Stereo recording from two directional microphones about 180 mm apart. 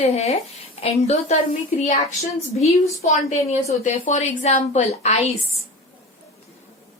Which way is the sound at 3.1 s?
40° left (ahead or behind).